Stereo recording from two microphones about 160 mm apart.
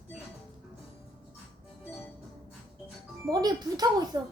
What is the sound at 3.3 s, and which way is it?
Speech, 25° right (ahead or behind).